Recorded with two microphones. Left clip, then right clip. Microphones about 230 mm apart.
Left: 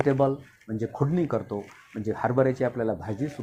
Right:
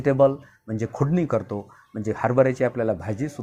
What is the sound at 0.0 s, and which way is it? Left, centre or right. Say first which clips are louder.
Speech: right 5 dB; right.